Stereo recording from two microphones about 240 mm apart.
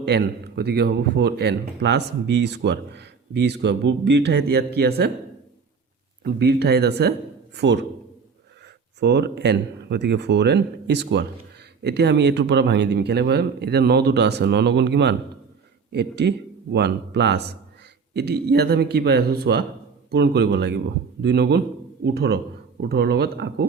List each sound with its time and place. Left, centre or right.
0.0 s speech: right
6.2 s speech: right
9.0 s speech: right